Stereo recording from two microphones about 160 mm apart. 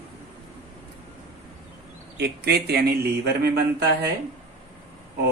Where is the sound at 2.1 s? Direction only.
85° right.